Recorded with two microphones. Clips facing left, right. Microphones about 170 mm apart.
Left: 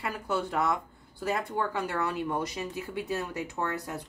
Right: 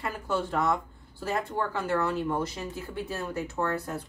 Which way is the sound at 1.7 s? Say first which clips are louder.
Right 3 dB; 15° left (ahead or behind).